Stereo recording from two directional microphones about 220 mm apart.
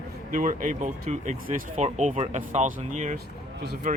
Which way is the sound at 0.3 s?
35° right (ahead or behind).